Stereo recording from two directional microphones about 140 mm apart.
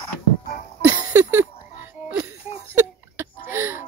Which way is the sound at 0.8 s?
15° right (ahead or behind).